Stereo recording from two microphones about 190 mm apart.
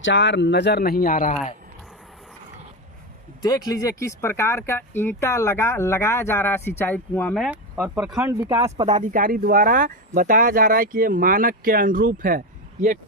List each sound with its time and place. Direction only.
0.0 s speech: 75° left (ahead or behind); by 1.4 s 45° left (ahead or behind)
3.4 s speech: 20° left (ahead or behind); by 8.6 s 15° right (ahead or behind)
8.9 s speech: 45° right (ahead or behind)